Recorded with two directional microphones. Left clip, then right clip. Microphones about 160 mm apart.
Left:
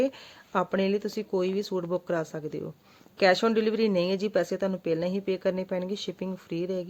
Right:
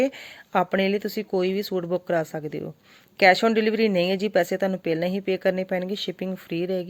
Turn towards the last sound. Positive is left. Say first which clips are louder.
# right 4 dB
turn(degrees=-10)  # may be behind; listen again after turning